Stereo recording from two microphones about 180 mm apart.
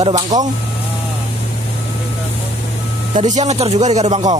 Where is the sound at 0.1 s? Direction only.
20° right (ahead or behind).